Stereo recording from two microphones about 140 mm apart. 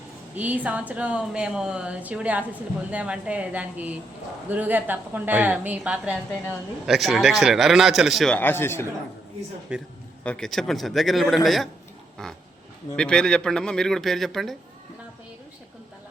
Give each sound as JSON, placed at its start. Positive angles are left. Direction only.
{"t": 0.3, "sound": "speech", "side_deg": -10}
{"t": 8.4, "sound": "a man's voice", "side_deg": 15}
{"t": 9.7, "sound": "speech", "side_deg": -10}
{"t": 10.2, "sound": "speech", "side_deg": 5}
{"t": 12.1, "sound": "a sound", "side_deg": 5}
{"t": 13.0, "sound": "speech", "side_deg": 5}